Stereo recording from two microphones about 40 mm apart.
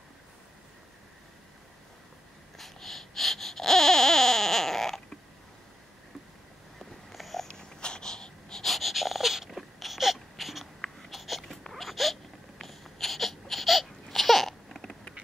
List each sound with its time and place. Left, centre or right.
2.5 s baby cry: centre
6.8 s a sound: centre
7.4 s wheeze: centre
8.6 s wheeze: centre
11.1 s a sound: centre
12.5 s crying: centre